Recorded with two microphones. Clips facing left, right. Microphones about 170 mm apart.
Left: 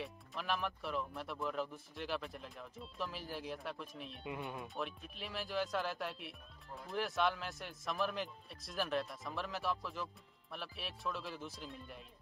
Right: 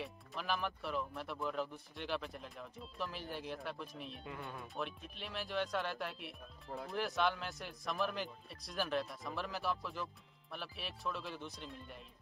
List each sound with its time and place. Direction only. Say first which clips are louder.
0.0 s speech: even; centre (ahead or behind)
4.2 s speech: left 7 dB; 20° left (ahead or behind)
4.7 s speech: even; centre (ahead or behind)